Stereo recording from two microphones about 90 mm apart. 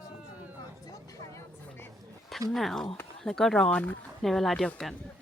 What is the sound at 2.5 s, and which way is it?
Speech, 5° left (ahead or behind).